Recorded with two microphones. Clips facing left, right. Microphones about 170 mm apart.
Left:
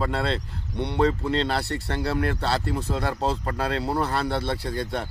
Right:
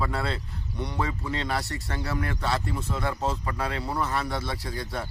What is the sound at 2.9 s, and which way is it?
Speech, 75° left (ahead or behind).